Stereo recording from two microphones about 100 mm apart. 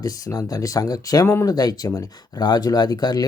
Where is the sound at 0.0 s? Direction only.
40° left (ahead or behind).